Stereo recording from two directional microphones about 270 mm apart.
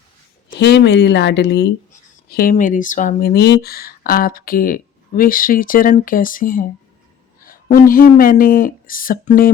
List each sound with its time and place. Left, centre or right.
0.6 s speech: left